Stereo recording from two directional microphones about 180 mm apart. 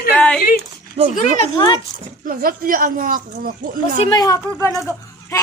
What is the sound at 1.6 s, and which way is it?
Speech, 25° left (ahead or behind).